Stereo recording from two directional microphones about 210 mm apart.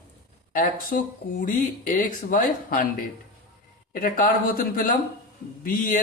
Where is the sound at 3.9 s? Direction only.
40° left (ahead or behind).